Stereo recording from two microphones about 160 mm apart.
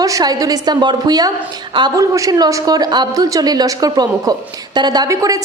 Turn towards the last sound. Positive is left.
turn(degrees=-20)  # may be behind; listen again after turning